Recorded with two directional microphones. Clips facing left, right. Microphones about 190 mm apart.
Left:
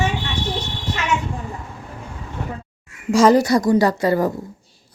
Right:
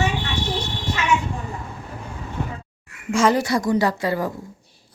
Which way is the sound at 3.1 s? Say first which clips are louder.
Left 5 dB; 40° left (ahead or behind).